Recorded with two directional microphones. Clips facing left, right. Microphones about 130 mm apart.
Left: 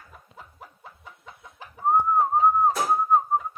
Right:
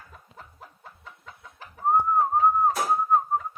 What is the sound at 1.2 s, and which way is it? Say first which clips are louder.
Chicken: left 1 dB; 15° left (ahead or behind).